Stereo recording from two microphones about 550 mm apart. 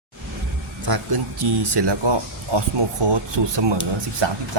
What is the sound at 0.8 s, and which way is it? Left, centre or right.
Speech, right.